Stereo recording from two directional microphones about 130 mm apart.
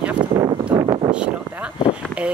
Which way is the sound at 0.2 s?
40° right (ahead or behind).